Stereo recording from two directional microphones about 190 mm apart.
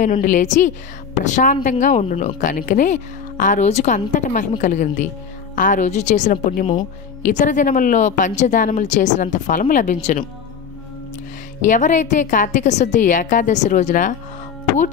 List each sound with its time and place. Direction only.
0.2 s a woman's voice: 40° left (ahead or behind)
6.6 s speech: 25° left (ahead or behind)
7.2 s a woman's voice: 40° left (ahead or behind)
11.6 s a woman's voice: 40° left (ahead or behind)